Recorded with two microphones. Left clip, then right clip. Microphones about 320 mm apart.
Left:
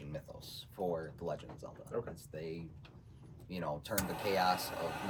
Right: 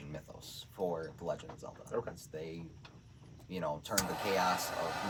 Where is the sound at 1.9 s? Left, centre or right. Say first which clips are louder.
Right 2 dB; right.